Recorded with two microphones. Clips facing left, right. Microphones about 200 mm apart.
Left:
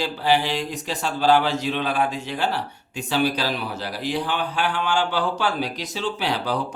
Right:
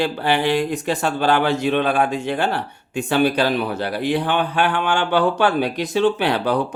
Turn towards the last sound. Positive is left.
turn(degrees=-60)  # may be behind; listen again after turning